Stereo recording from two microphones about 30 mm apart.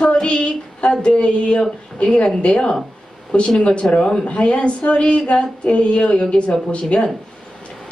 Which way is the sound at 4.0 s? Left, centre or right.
Centre.